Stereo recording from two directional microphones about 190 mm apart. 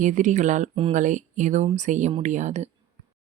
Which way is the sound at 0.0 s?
40° right (ahead or behind).